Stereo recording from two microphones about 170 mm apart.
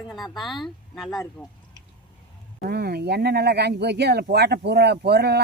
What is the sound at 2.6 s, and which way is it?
Speech, 65° right (ahead or behind).